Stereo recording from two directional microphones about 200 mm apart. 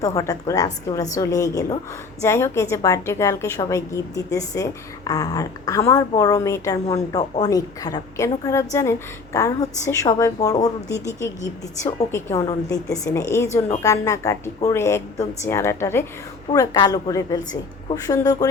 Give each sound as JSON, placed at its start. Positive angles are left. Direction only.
{"t": 0.0, "sound": "a woman's voice", "side_deg": 15}
{"t": 11.8, "sound": "a woman's voice", "side_deg": 35}
{"t": 12.1, "sound": "a woman's voice", "side_deg": 15}